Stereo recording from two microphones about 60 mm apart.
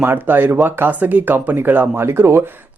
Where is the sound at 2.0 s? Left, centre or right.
Right.